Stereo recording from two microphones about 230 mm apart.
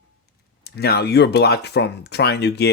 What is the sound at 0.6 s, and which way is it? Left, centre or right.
Speech, left.